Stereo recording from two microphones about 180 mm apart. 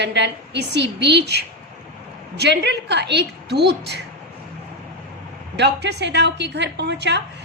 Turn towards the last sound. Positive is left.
turn(degrees=-70)  # may be behind; listen again after turning